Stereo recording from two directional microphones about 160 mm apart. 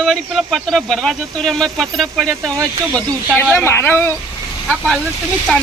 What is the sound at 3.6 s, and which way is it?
Speech, 15° left (ahead or behind).